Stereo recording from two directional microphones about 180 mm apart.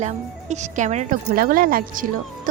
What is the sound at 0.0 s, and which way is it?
A woman's voice, 40° right (ahead or behind).